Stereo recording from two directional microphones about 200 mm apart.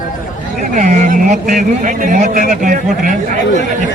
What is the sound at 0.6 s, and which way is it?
A man's voice, 40° right (ahead or behind).